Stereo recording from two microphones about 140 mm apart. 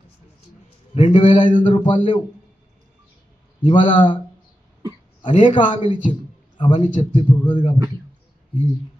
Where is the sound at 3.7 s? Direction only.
35° left (ahead or behind).